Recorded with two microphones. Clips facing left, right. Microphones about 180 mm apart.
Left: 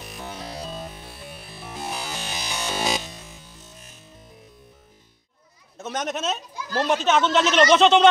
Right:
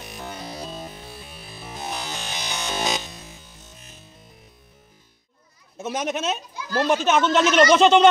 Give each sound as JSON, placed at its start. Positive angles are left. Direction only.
{"t": 0.0, "sound": "music", "side_deg": 0}
{"t": 1.1, "sound": "music", "side_deg": 60}
{"t": 1.9, "sound": "music", "side_deg": 5}
{"t": 5.8, "sound": "speech", "side_deg": -5}